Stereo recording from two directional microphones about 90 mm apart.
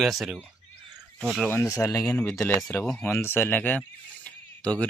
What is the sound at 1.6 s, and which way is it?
Speech, 35° left (ahead or behind).